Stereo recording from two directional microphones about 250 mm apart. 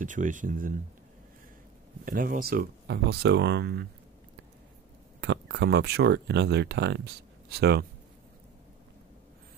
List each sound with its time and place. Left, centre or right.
0.0 s speech: right
2.0 s speech: right
5.2 s speech: right